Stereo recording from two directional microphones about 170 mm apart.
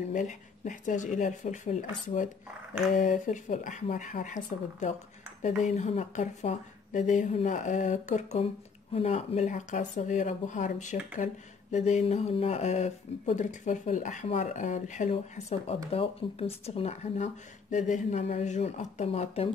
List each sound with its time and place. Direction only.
0.1 s a woman's voice: 50° left (ahead or behind)
3.0 s a woman's voice: 45° left (ahead or behind)